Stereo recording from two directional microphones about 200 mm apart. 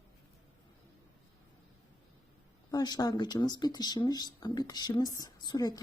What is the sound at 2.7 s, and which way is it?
Speech, 20° left (ahead or behind).